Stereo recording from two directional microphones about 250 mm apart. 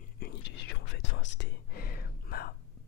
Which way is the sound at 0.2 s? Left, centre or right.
Left.